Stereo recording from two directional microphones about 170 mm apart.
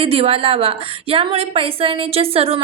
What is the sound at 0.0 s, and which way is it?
A woman's voice, 35° right (ahead or behind).